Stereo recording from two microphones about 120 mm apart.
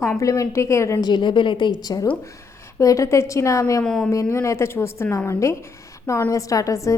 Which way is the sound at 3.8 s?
5° left (ahead or behind).